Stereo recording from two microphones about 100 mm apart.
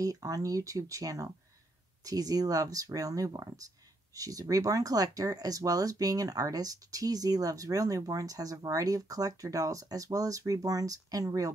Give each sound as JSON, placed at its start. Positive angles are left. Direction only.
{"t": 0.0, "sound": "speech", "side_deg": -35}